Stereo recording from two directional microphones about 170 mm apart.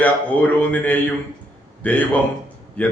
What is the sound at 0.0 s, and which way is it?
Speech, 10° left (ahead or behind).